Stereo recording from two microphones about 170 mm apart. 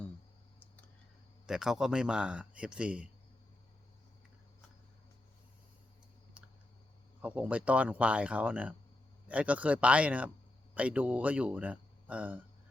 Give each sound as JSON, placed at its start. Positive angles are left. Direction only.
{"t": 1.5, "sound": "speech", "side_deg": -5}
{"t": 6.4, "sound": "a sound", "side_deg": -10}
{"t": 7.2, "sound": "speech", "side_deg": -10}